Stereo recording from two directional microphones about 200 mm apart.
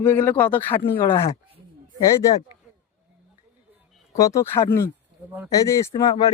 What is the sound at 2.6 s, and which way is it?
Chop, 5° right (ahead or behind).